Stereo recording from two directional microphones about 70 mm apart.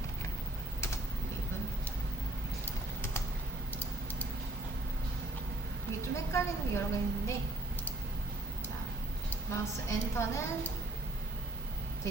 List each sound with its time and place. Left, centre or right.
3.0 s typing: left
6.0 s a woman's voice: left
9.5 s a woman's voice: left